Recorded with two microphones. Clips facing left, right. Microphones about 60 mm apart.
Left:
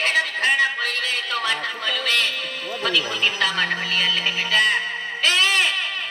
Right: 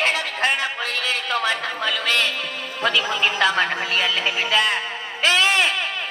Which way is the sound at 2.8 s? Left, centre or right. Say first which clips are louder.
Right 2 dB; right.